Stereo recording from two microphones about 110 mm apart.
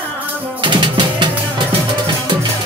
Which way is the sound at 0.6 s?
45° right (ahead or behind).